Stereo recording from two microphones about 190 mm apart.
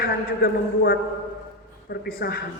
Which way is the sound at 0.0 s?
55° left (ahead or behind).